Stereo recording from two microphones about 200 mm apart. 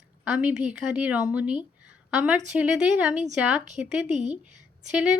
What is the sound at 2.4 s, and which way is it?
Speech, 5° right (ahead or behind).